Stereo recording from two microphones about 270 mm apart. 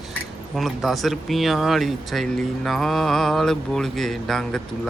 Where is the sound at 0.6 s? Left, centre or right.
Centre.